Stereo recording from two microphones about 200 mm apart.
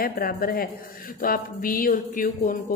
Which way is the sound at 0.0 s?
45° left (ahead or behind).